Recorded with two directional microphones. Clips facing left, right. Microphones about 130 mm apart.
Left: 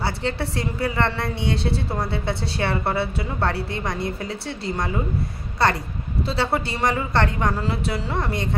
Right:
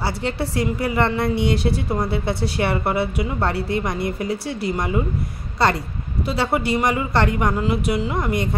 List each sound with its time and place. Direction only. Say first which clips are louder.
0.6 s a woman's voice: right 5 dB; 15° right (ahead or behind)
1.5 s speech: right 3 dB; 25° left (ahead or behind)
2.0 s a woman's voice: right 3 dB; 20° right (ahead or behind)
6.2 s a woman's voice: right 3 dB; 15° right (ahead or behind)